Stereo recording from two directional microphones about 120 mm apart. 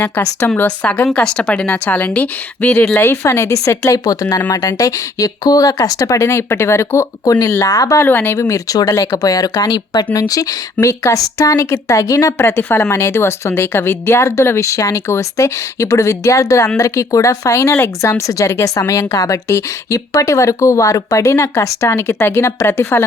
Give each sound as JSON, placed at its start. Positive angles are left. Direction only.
{"t": 0.0, "sound": "speech", "side_deg": 15}